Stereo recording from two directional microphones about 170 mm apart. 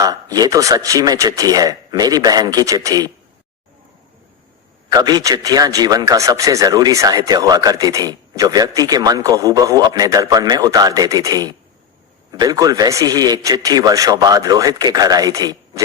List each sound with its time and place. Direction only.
0.0 s speech: 20° right (ahead or behind)
4.9 s speech: 25° right (ahead or behind)